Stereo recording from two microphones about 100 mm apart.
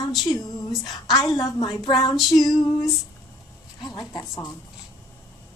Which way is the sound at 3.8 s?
45° left (ahead or behind).